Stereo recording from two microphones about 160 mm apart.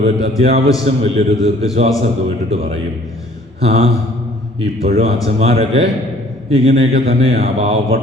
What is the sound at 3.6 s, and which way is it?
A man's voice, 40° right (ahead or behind).